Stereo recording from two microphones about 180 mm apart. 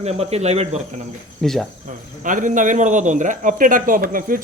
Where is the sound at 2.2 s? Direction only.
45° right (ahead or behind).